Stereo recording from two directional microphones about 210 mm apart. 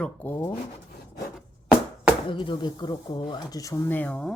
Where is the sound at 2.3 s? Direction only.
25° left (ahead or behind).